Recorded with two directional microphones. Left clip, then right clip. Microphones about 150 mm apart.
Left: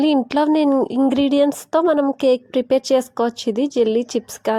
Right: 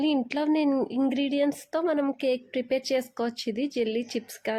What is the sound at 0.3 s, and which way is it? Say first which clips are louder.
A woman's voice: left 9 dB; 40° left (ahead or behind).